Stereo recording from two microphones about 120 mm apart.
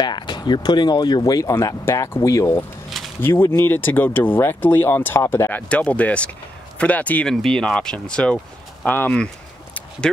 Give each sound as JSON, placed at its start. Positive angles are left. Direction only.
{"t": 0.0, "sound": "speech", "side_deg": 35}